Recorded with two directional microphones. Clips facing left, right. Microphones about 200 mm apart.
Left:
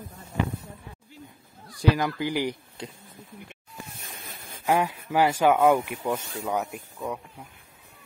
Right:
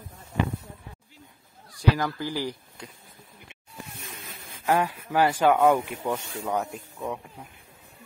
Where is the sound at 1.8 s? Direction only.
15° left (ahead or behind).